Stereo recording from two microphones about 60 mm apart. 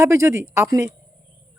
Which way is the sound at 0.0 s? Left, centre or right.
Right.